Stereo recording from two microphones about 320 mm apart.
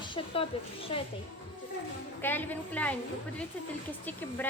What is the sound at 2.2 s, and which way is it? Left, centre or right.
Speech, centre.